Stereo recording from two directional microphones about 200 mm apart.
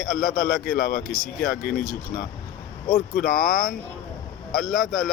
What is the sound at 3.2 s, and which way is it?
Speech, 45° left (ahead or behind).